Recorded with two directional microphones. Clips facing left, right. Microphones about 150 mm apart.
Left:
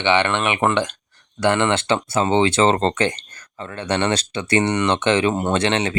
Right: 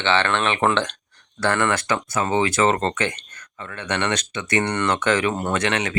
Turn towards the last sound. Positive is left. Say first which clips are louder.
# left 3 dB
turn(degrees=30)  # may be behind; listen again after turning